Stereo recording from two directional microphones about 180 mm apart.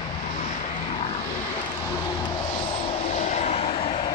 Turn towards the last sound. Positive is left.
turn(degrees=35)  # may be behind; listen again after turning